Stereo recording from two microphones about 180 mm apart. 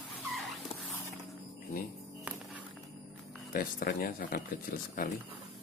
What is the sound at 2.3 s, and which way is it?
Music, 10° right (ahead or behind).